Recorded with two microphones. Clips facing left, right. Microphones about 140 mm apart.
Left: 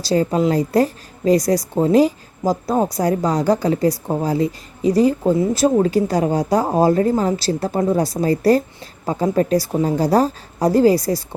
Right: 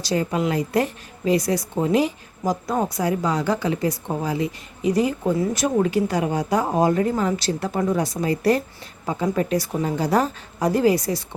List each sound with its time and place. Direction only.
0.0 s speech: 35° left (ahead or behind)